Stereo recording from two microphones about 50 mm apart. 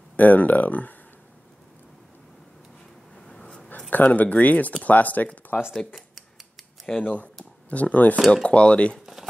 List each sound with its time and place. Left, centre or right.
0.1 s speech: left
3.2 s a sound: centre
3.9 s speech: left
7.0 s chopping: left
7.7 s speech: left
8.3 s chopping: left
9.0 s a sound: centre